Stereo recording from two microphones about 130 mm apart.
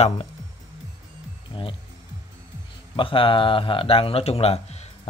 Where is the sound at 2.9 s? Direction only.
40° left (ahead or behind).